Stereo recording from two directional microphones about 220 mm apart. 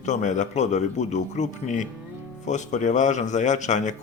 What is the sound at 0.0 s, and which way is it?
A man's voice, 35° left (ahead or behind).